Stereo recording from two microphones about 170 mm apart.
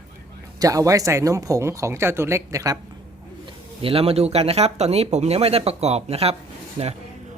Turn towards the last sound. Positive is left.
turn(degrees=-35)  # may be behind; listen again after turning